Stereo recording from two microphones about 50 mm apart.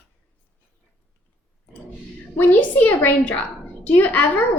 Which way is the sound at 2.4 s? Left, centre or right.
Left.